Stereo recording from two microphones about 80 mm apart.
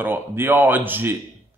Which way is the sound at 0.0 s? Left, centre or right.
Right.